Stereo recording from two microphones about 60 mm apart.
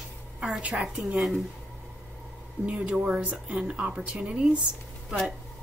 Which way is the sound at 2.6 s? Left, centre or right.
Centre.